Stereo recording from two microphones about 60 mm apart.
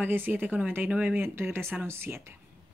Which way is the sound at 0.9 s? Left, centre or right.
Right.